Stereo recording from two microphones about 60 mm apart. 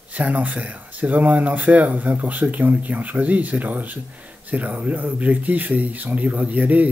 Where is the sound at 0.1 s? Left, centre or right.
Right.